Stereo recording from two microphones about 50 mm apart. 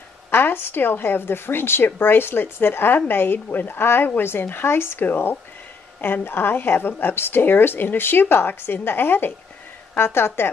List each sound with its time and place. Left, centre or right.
0.3 s speech: left
6.2 s speech: left